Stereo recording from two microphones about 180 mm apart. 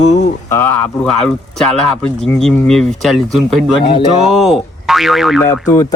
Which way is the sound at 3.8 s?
25° left (ahead or behind).